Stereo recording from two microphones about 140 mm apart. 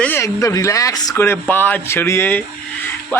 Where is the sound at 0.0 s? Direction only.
15° left (ahead or behind).